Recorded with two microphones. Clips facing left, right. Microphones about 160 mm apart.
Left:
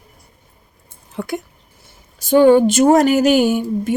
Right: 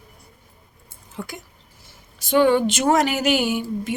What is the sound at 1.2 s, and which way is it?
Speech, 60° left (ahead or behind).